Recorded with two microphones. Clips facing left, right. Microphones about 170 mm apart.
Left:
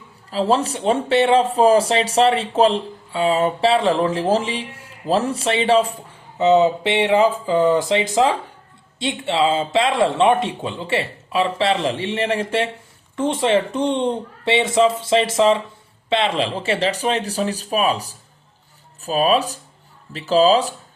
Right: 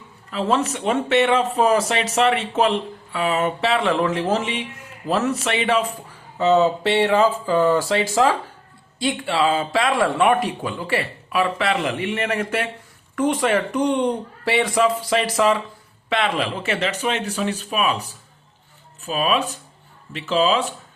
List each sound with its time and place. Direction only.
0.3 s speech: 30° left (ahead or behind)
6.4 s speech: 20° left (ahead or behind); by 20.7 s 35° left (ahead or behind)